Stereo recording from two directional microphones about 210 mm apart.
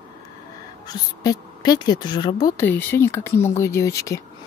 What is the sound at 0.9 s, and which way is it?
Speech, 20° left (ahead or behind).